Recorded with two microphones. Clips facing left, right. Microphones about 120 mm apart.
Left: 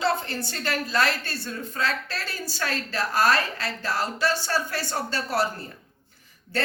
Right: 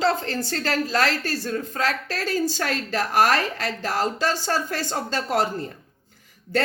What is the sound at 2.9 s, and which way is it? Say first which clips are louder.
Speech: right 3 dB; 90° right.